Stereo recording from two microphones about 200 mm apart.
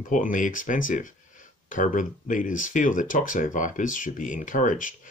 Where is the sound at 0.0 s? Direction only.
40° left (ahead or behind).